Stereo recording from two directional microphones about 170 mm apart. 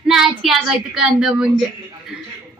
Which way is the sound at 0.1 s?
Centre (ahead or behind).